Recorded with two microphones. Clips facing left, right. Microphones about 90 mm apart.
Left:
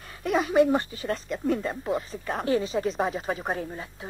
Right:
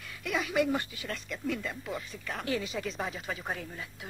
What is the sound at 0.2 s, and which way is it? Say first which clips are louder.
Speech: left 8 dB; 40° left (ahead or behind).